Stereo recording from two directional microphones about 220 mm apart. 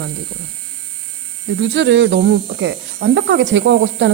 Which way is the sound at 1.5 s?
55° right (ahead or behind).